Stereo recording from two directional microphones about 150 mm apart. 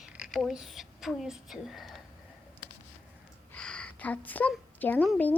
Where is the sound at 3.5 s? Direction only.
5° left (ahead or behind).